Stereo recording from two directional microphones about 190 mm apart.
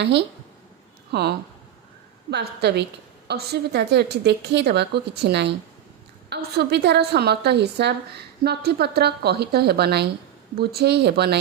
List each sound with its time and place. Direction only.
0.0 s a woman's voice: 60° right (ahead or behind)